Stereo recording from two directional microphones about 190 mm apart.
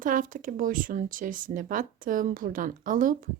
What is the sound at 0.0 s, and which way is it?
Speech, 45° right (ahead or behind).